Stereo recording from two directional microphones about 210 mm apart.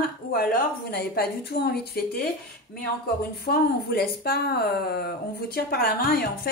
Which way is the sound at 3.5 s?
50° left (ahead or behind).